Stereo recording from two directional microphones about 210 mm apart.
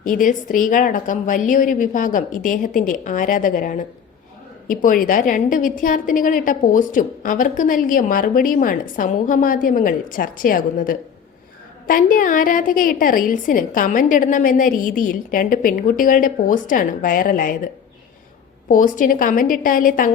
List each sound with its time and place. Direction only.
0.0 s a woman's voice: 40° left (ahead or behind)
18.7 s a woman's voice: 40° left (ahead or behind)